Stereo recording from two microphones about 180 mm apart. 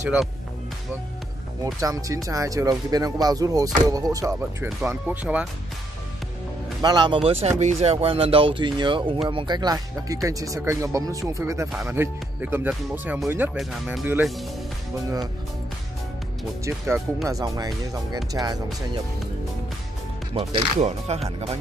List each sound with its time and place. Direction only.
1.6 s speech: 20° right (ahead or behind)
6.8 s speech: 25° right (ahead or behind)
7.4 s speech: 40° right (ahead or behind); by 14.4 s 5° right (ahead or behind)
16.6 s speech: 15° right (ahead or behind)
20.3 s speech: 35° right (ahead or behind)